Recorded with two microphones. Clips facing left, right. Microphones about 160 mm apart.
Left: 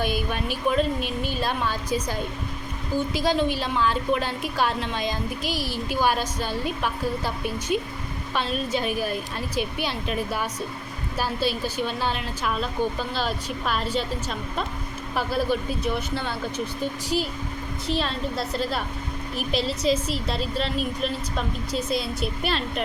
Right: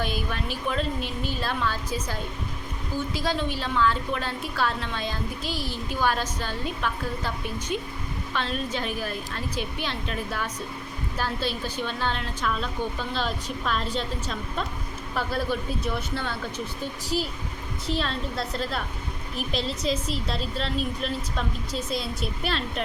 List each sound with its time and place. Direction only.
0.0 s a woman's voice: 15° left (ahead or behind)
17.9 s a woman's voice: centre (ahead or behind)